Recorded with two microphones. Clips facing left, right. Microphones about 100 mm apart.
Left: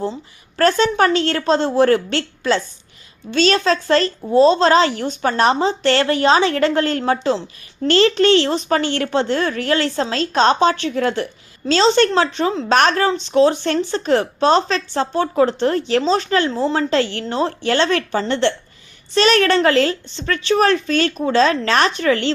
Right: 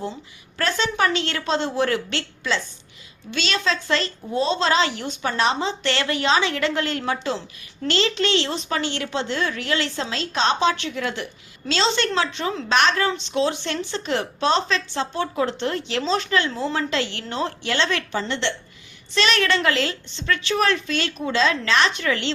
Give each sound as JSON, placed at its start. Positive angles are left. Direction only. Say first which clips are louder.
{"t": 0.6, "sound": "a woman's voice", "louder": "left 7 dB", "side_deg": 45}
{"t": 12.7, "sound": "a woman's voice", "louder": "left 4 dB", "side_deg": 45}